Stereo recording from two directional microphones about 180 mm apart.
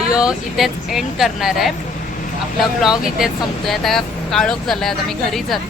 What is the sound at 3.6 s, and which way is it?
Speech, centre (ahead or behind).